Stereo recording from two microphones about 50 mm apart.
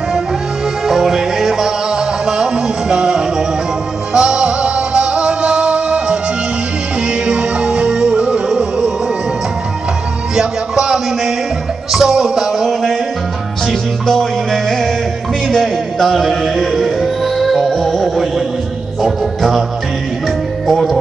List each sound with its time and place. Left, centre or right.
0.8 s music: centre; by 6.1 s right
7.2 s music: right
10.3 s music: centre
14.0 s music: centre
20.6 s music: centre